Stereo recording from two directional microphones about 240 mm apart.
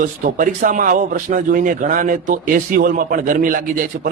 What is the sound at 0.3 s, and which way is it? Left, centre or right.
A man's voice, right.